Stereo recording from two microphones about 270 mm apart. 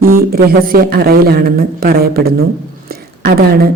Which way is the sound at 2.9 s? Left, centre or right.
Right.